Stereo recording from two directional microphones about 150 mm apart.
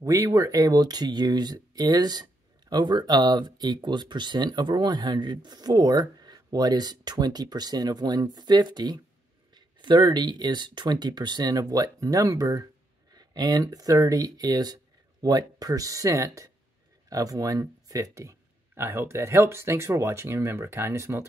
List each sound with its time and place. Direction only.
0.0 s speech: 20° right (ahead or behind)